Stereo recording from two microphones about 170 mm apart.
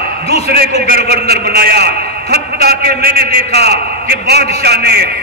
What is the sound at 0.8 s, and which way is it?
A man's voice, 65° right (ahead or behind).